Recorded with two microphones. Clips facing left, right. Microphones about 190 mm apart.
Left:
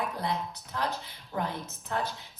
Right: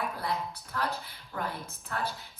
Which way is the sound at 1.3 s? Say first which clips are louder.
Left 3 dB; 20° left (ahead or behind).